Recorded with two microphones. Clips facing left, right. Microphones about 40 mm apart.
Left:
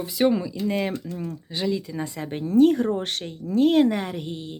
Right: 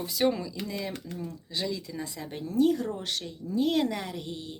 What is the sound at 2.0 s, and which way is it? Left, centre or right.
Speech, left.